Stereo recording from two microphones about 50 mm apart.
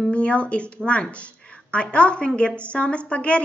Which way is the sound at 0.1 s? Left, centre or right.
Left.